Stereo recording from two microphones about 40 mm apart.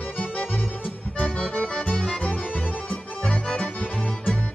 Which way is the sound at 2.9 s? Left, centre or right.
Left.